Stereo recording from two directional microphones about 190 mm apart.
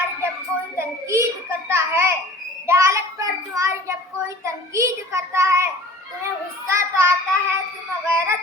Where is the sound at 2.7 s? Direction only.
15° right (ahead or behind).